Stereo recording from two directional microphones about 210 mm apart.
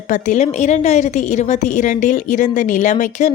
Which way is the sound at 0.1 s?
35° left (ahead or behind).